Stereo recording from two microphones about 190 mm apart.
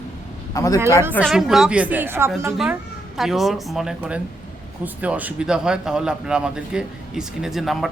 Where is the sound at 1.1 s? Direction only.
Centre (ahead or behind).